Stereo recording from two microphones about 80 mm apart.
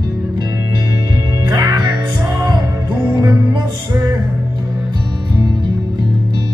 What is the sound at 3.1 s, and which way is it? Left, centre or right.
Music, right.